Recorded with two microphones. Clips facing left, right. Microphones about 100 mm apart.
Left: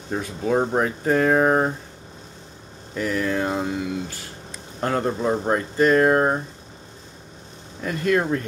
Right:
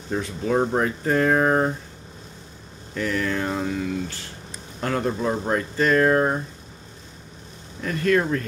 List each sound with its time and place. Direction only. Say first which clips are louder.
0.1 s speech: left 1 dB; 10° left (ahead or behind)
3.0 s speech: left 1 dB; 15° left (ahead or behind)
4.8 s speech: left 2 dB; 20° left (ahead or behind)
7.8 s speech: even; 15° left (ahead or behind)